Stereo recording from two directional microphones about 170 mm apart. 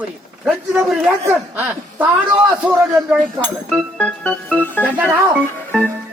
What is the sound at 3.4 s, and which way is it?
Speech, 5° left (ahead or behind).